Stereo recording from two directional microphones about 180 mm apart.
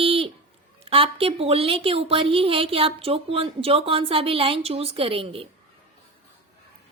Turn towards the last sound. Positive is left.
turn(degrees=-30)  # may be behind; listen again after turning